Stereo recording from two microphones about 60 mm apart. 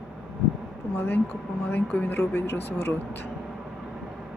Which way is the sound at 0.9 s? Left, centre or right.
Left.